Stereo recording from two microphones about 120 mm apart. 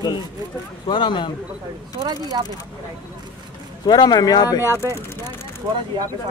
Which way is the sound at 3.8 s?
35° left (ahead or behind).